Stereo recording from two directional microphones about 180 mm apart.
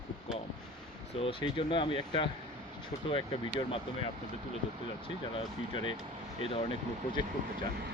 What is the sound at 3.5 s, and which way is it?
Speech, 30° left (ahead or behind).